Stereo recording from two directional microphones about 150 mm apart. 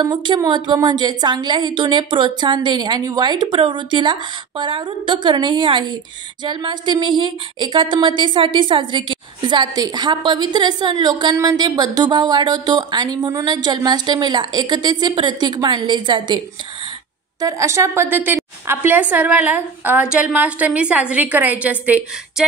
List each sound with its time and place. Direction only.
0.0 s a woman's voice: 30° right (ahead or behind)
17.4 s a woman's voice: 20° right (ahead or behind)